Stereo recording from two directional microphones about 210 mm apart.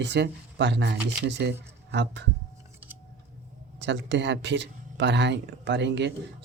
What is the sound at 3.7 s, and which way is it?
Speech, 60° right (ahead or behind).